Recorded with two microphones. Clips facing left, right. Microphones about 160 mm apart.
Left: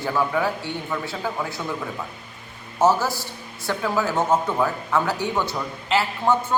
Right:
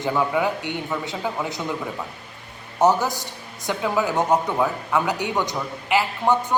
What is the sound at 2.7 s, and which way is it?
A man's voice, 15° right (ahead or behind).